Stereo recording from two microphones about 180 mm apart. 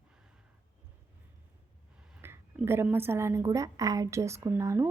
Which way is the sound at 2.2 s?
15° right (ahead or behind).